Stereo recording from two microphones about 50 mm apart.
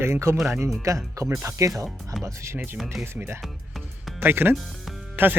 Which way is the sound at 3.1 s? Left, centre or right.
Right.